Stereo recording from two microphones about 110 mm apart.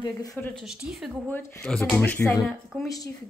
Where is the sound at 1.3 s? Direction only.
20° left (ahead or behind).